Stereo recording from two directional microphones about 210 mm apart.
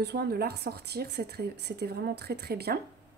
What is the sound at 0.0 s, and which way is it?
A woman's voice, 50° right (ahead or behind).